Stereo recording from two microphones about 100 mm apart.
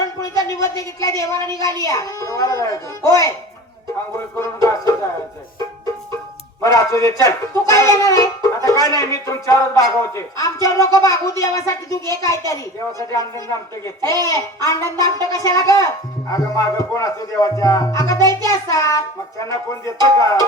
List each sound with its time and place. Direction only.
0.0 s a woman's voice: 35° left (ahead or behind)
4.4 s speech: 35° left (ahead or behind)
6.6 s speech: 35° left (ahead or behind)